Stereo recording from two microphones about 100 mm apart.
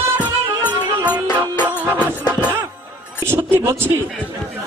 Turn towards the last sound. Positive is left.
turn(degrees=-30)  # may be behind; listen again after turning